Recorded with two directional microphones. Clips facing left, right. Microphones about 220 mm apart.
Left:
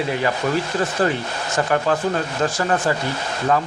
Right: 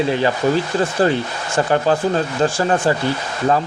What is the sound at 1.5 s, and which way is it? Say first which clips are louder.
Speech: right 3 dB; 30° right (ahead or behind).